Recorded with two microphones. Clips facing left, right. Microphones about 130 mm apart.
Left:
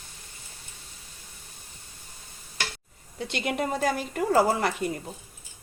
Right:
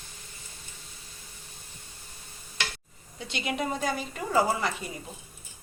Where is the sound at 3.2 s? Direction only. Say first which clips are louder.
Left 3 dB; 60° left (ahead or behind).